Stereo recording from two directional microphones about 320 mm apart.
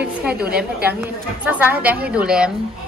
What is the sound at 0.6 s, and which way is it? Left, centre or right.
Speech, centre.